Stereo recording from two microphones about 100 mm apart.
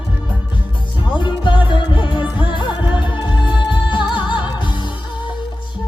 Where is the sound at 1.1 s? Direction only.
50° left (ahead or behind).